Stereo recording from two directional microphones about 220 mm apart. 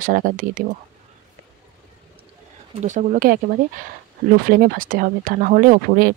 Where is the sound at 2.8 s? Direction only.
35° right (ahead or behind).